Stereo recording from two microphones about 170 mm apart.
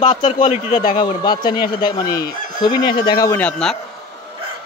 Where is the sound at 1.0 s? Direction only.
25° left (ahead or behind); by 3.7 s 5° left (ahead or behind).